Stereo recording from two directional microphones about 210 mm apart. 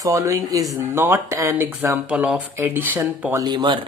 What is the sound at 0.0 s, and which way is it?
Speech, 15° right (ahead or behind).